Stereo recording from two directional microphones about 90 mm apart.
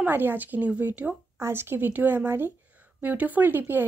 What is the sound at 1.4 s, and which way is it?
Speech, 25° right (ahead or behind).